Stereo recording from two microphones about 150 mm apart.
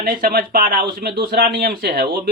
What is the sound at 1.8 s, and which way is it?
Speech, 90° right.